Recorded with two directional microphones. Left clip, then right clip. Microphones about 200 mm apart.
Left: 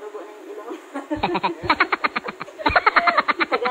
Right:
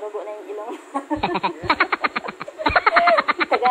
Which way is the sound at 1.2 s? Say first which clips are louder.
Left 3 dB; centre (ahead or behind).